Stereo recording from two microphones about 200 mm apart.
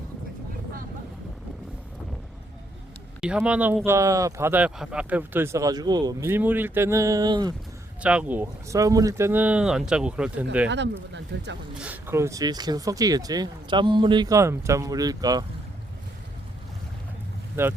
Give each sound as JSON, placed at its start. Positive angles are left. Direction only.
{"t": 3.2, "sound": "speech", "side_deg": -5}
{"t": 8.0, "sound": "speech", "side_deg": -5}
{"t": 10.7, "sound": "speech", "side_deg": -60}
{"t": 11.8, "sound": "speech", "side_deg": -10}
{"t": 17.6, "sound": "speech", "side_deg": -10}